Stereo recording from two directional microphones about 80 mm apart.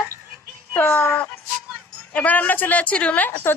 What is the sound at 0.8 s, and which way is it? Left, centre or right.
A woman's voice, left.